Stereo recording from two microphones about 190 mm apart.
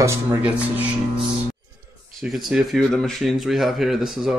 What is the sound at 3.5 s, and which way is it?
Speech, centre (ahead or behind).